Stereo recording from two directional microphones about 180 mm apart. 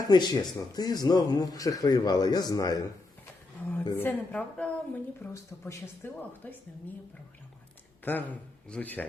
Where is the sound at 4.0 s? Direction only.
10° left (ahead or behind).